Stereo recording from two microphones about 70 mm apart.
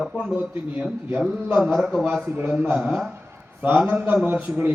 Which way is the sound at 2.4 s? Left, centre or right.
Right.